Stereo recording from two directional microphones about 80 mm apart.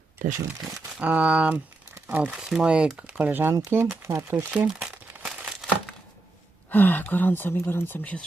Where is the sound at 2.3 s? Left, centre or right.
Centre; by 4.4 s right.